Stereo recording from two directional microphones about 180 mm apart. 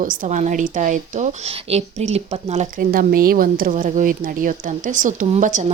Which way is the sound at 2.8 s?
55° right (ahead or behind).